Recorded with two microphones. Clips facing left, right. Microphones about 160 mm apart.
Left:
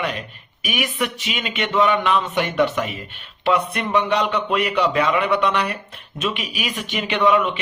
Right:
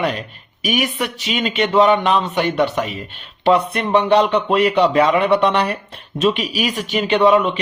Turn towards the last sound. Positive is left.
turn(degrees=-35)  # may be behind; listen again after turning